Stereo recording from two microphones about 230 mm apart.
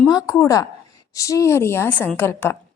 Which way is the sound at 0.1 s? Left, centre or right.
Centre.